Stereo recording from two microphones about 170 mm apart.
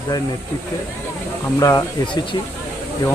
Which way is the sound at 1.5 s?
20° left (ahead or behind).